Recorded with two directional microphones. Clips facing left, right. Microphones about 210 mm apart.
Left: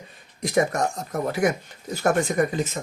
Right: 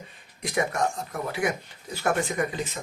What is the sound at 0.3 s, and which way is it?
Speech, 40° left (ahead or behind).